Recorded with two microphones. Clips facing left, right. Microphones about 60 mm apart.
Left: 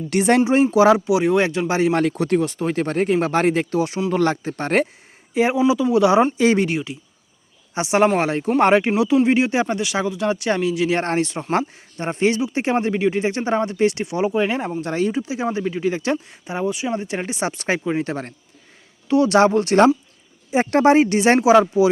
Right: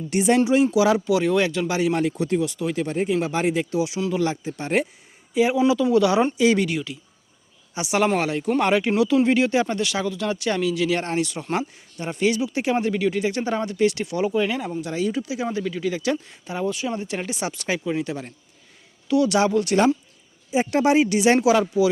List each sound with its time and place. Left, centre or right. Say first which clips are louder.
0.1 s speech: left 2 dB; left
0.4 s speech: left 4 dB; left
0.9 s speech: left 2 dB; left
1.9 s speech: left 3 dB; left
2.4 s speech: left 3 dB; left
2.8 s speech: left 4 dB; left
5.3 s speech: left 1 dB; left
5.5 s speech: left 1 dB; centre
6.3 s speech: left 2 dB; left
11.0 s speech: left 3 dB; left
15.1 s a man's voice: left 3 dB; left
20.5 s speech: left 4 dB; left